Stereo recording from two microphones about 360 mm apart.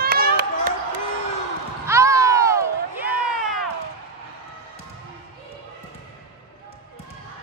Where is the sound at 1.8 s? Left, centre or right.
Centre.